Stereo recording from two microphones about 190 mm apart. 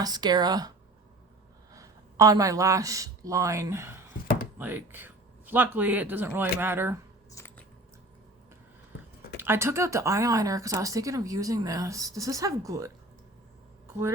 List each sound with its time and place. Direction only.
0.0 s speech: 20° right (ahead or behind)
1.7 s speech: 15° right (ahead or behind)
9.4 s speech: 15° right (ahead or behind)